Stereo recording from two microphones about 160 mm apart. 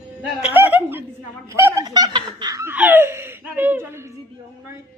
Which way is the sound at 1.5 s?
15° right (ahead or behind).